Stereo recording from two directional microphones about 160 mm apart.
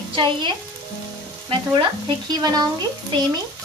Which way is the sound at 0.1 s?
30° right (ahead or behind).